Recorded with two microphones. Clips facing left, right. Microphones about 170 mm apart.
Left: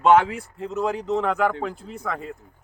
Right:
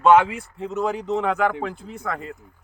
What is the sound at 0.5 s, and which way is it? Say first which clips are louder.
Speech: right 1 dB; centre (ahead or behind).